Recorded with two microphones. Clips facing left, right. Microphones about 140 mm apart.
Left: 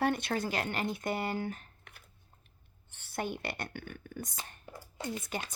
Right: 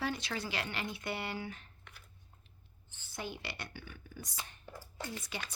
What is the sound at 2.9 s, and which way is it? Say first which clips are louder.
Speech: left 6 dB; 65° left (ahead or behind).